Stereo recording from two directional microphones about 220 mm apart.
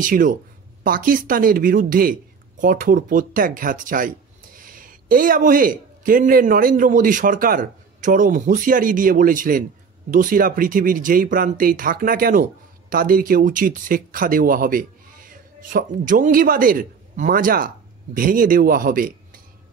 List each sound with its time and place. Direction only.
0.0 s a man's voice: 35° right (ahead or behind)